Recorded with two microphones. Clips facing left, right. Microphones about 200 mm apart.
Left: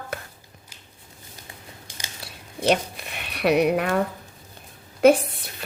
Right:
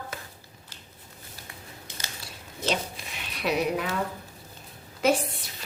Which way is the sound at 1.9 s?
15° left (ahead or behind).